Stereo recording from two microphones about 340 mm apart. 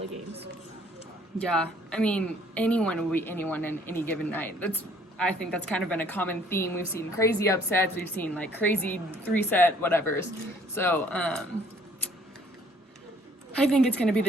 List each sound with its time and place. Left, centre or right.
1.4 s a woman's voice: centre
13.6 s a woman's voice: centre